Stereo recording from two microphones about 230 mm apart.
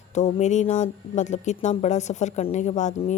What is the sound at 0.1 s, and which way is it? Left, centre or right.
Speech, left.